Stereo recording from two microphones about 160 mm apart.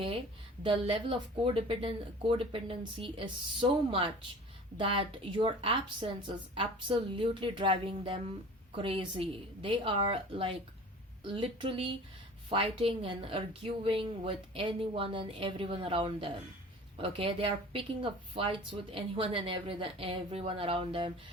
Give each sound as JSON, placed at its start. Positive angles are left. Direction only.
{"t": 0.6, "sound": "speech", "side_deg": -30}